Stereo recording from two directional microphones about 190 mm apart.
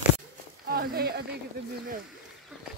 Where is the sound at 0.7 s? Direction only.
50° right (ahead or behind).